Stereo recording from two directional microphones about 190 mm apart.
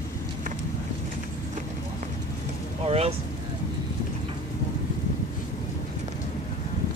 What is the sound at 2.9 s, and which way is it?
Speech, 30° right (ahead or behind).